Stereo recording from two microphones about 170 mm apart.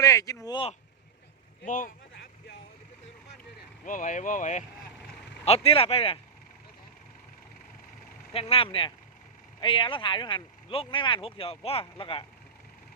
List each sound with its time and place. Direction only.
0.0 s speech: 20° left (ahead or behind)
1.6 s speech: 50° left (ahead or behind)
3.8 s speech: 50° left (ahead or behind)
5.6 s speech: 35° left (ahead or behind)
8.3 s speech: 35° left (ahead or behind)